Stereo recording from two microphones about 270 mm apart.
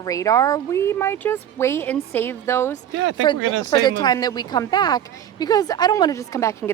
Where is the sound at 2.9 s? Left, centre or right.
Right.